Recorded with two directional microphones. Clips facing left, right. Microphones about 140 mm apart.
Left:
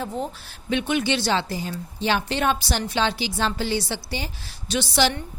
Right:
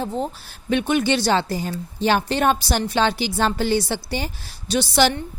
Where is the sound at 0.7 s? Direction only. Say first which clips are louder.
Right 4 dB; 50° right (ahead or behind).